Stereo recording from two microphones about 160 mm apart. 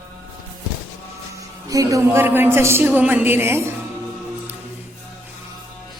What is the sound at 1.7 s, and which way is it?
A woman's voice, 20° right (ahead or behind).